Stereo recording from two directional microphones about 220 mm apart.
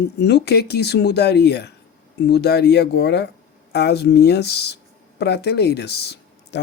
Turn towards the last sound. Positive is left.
turn(degrees=50)  # may be behind; listen again after turning